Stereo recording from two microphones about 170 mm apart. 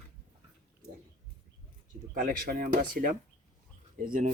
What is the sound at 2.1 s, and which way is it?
Speech, 55° right (ahead or behind).